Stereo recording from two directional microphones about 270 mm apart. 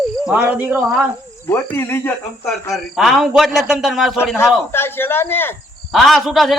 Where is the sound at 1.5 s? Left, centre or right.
Centre.